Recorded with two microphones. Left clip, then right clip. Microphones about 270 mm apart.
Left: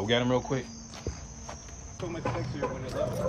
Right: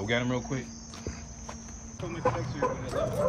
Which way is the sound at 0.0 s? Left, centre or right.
Centre.